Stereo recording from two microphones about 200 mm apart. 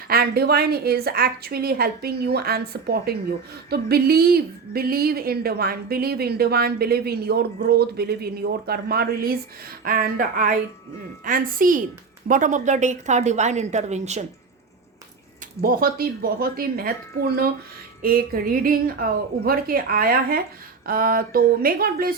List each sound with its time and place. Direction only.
0.1 s speech: 50° right (ahead or behind); by 14.3 s 35° right (ahead or behind)
15.6 s speech: 45° right (ahead or behind)
18.0 s speech: 45° right (ahead or behind)